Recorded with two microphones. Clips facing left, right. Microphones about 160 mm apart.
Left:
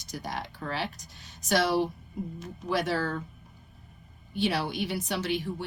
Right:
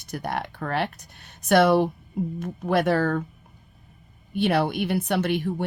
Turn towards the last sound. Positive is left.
turn(degrees=-55)  # may be behind; listen again after turning